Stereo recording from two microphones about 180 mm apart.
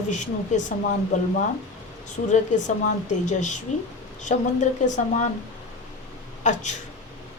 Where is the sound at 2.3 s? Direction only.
45° left (ahead or behind).